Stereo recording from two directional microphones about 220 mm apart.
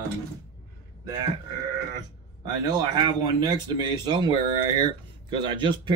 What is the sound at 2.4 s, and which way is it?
Speech, 15° right (ahead or behind).